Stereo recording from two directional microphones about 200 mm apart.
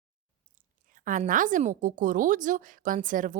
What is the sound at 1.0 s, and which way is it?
A woman's voice, 40° right (ahead or behind).